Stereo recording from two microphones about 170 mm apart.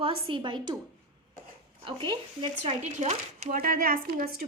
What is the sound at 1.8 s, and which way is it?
Speech, 30° right (ahead or behind).